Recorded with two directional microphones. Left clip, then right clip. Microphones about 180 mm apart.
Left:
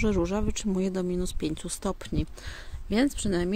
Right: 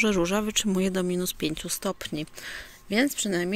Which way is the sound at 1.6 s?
15° left (ahead or behind).